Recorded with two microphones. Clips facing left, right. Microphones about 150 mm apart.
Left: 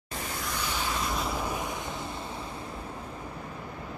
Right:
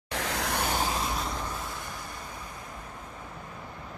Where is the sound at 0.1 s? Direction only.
80° right; by 0.7 s 65° right (ahead or behind).